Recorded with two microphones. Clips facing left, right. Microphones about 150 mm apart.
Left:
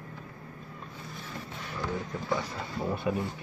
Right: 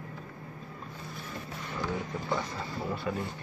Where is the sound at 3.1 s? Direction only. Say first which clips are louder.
Left 4 dB; 20° left (ahead or behind).